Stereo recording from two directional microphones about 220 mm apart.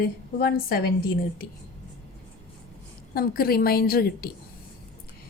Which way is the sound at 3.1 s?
45° left (ahead or behind).